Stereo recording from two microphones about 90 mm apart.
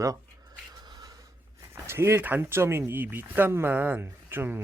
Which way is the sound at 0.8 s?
50° right (ahead or behind).